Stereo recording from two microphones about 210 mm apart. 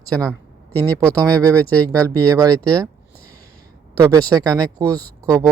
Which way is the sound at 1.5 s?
5° left (ahead or behind).